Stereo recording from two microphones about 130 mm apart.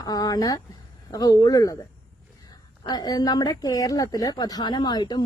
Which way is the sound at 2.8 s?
30° left (ahead or behind).